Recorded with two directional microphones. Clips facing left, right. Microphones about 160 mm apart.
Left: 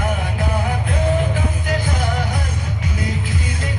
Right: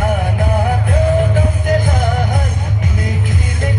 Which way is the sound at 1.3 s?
50° right (ahead or behind).